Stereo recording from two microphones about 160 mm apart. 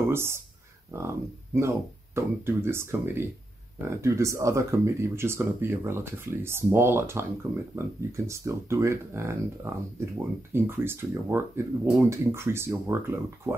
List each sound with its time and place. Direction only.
0.1 s speech: 15° right (ahead or behind)